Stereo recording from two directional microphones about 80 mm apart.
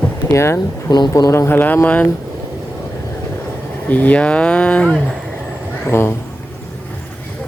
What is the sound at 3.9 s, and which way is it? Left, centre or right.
Speech, centre.